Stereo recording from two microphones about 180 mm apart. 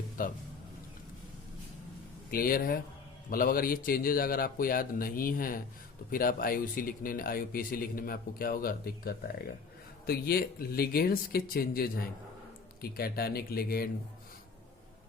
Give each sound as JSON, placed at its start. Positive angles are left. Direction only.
{"t": 0.2, "sound": "speech", "side_deg": 50}
{"t": 2.3, "sound": "speech", "side_deg": 55}